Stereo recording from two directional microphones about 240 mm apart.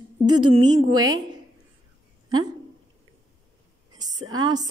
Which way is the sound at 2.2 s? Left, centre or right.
Centre.